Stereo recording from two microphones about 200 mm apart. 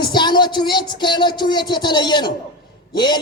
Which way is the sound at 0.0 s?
20° left (ahead or behind).